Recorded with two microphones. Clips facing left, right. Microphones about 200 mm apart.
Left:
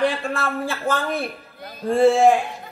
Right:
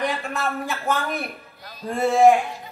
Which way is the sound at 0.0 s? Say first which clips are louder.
Left 4 dB; 30° left (ahead or behind).